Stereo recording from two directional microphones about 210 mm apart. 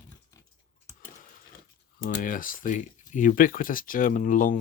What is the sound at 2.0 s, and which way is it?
Speech, 40° left (ahead or behind).